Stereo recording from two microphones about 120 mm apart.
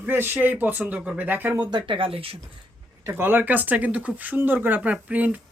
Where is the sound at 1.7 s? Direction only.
45° right (ahead or behind).